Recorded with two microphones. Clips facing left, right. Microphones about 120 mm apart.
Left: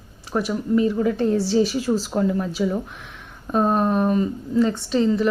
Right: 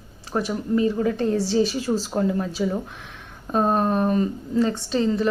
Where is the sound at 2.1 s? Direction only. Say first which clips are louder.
Left 1 dB; 35° right (ahead or behind).